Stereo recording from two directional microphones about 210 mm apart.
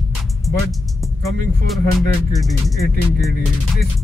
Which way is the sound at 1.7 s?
Centre (ahead or behind).